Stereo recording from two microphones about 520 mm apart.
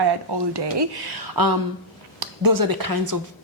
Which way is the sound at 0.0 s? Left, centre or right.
Right.